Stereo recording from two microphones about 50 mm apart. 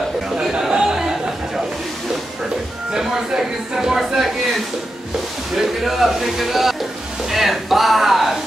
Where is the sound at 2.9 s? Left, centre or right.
Centre.